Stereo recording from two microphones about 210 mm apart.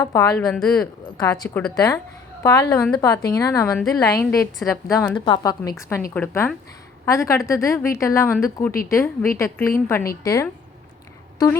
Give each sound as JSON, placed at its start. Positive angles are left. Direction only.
{"t": 0.0, "sound": "a woman's voice", "side_deg": 15}
{"t": 1.7, "sound": "a woman's voice", "side_deg": 20}